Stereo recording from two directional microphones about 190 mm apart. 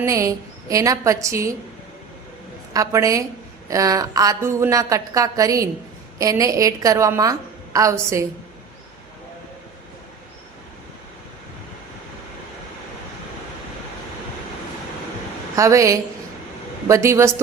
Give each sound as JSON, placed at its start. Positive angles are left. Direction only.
{"t": 0.0, "sound": "a woman's voice", "side_deg": -15}
{"t": 2.7, "sound": "a woman's voice", "side_deg": -15}
{"t": 15.5, "sound": "a woman's voice", "side_deg": -15}